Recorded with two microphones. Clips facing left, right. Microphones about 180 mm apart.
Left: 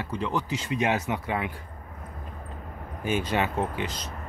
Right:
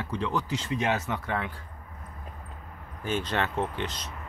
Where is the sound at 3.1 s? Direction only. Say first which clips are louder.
Left 3 dB; 10° left (ahead or behind).